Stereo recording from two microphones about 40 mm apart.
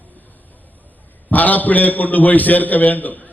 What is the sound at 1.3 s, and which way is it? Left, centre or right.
A man's voice, left.